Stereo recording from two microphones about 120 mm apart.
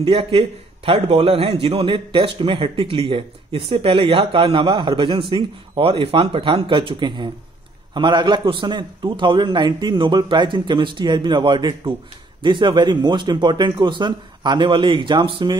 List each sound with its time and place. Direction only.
0.0 s a man's voice: 50° right (ahead or behind)